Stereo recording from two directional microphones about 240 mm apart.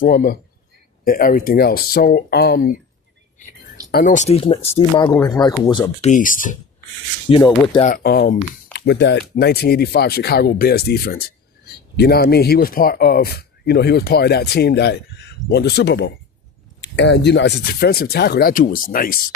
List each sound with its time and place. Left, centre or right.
0.0 s speech: left
3.9 s speech: left; by 5.9 s centre
6.0 s speech: left
7.3 s speech: centre; by 19.2 s left